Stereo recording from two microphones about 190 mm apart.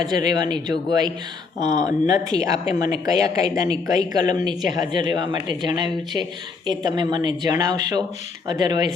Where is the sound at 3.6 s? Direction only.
20° right (ahead or behind).